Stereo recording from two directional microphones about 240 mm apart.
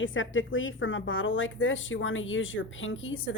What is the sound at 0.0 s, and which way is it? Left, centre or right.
Speech, left.